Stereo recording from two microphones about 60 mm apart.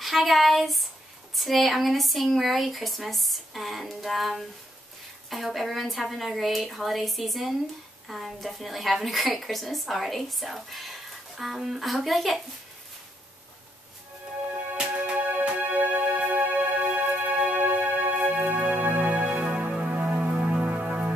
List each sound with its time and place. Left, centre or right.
0.0 s a woman's voice: centre
15.0 s music: right